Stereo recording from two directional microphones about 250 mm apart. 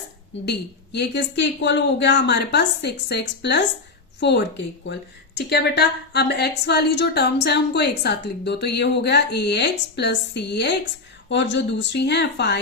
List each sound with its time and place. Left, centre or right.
0.9 s a woman's voice: left